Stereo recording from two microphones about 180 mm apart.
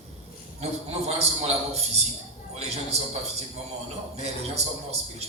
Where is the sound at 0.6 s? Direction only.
35° right (ahead or behind).